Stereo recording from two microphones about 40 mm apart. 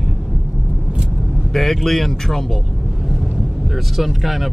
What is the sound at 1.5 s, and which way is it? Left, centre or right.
Speech, centre.